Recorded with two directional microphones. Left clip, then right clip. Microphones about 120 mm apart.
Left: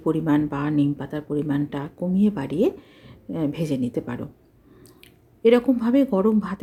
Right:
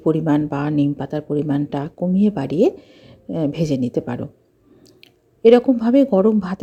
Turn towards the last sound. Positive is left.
turn(degrees=-30)  # may be behind; listen again after turning